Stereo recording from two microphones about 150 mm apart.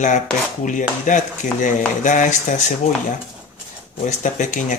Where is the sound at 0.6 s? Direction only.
60° left (ahead or behind).